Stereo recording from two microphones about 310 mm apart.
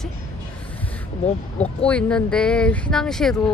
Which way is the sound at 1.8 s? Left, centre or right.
Centre.